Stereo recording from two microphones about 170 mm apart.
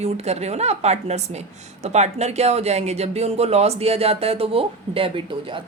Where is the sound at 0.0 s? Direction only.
40° right (ahead or behind).